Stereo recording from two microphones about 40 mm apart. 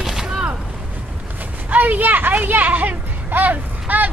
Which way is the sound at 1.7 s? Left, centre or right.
Right.